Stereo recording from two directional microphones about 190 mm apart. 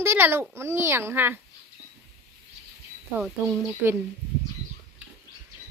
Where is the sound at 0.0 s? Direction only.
10° right (ahead or behind).